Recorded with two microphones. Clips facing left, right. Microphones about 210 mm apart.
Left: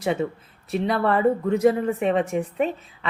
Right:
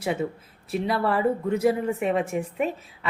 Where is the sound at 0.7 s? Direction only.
5° right (ahead or behind).